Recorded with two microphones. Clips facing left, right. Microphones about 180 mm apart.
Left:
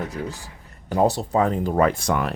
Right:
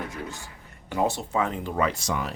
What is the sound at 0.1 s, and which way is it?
Speech, 35° left (ahead or behind).